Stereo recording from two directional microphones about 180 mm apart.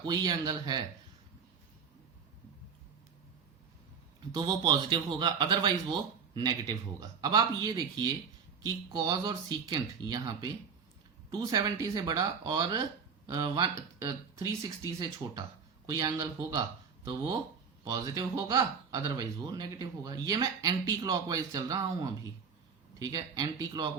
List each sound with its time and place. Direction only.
0.0 s speech: 20° right (ahead or behind)
4.4 s speech: 20° right (ahead or behind)